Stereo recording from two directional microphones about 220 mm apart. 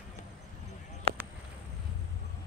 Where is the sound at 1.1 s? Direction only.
25° right (ahead or behind).